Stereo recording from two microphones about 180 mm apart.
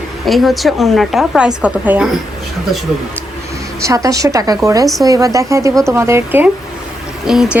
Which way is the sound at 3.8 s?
20° right (ahead or behind).